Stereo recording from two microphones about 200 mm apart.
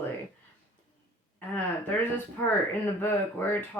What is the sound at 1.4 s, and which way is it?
Speech, 10° left (ahead or behind).